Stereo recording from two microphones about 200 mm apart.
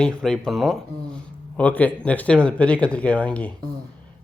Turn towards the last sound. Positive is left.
turn(degrees=5)  # may be behind; listen again after turning